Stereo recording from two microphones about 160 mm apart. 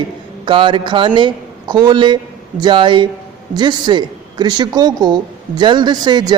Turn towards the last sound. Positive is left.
turn(degrees=-25)  # may be behind; listen again after turning